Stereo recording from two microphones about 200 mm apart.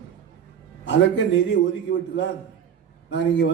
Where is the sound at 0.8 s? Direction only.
65° left (ahead or behind).